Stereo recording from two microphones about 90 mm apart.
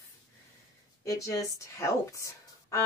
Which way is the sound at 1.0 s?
40° left (ahead or behind).